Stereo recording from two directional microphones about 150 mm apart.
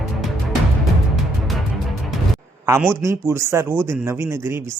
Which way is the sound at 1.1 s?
Centre (ahead or behind).